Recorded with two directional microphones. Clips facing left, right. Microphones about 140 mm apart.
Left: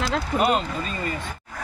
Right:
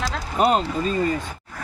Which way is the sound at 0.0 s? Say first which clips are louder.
Right 1 dB; 35° right (ahead or behind).